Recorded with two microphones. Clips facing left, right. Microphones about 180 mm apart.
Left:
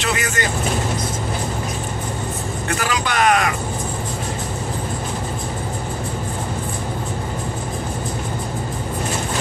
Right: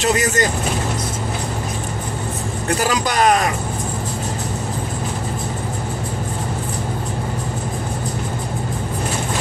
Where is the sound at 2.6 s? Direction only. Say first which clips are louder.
Right 4 dB; 40° right (ahead or behind).